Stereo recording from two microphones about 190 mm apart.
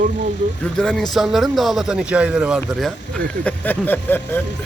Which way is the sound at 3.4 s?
10° left (ahead or behind).